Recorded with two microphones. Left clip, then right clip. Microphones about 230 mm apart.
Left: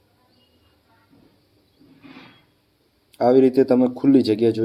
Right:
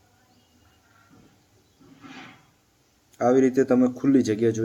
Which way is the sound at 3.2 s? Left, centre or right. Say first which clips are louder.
Left 4 dB; centre.